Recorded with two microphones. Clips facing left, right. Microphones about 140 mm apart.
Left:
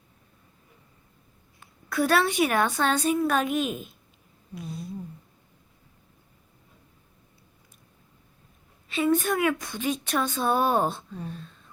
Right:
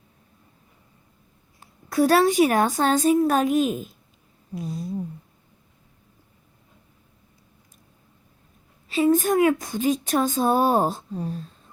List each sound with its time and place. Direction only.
1.5 s speech: 35° right (ahead or behind)
8.9 s speech: 35° right (ahead or behind)